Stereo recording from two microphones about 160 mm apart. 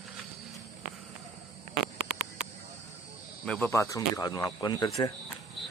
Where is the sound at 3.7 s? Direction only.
20° left (ahead or behind).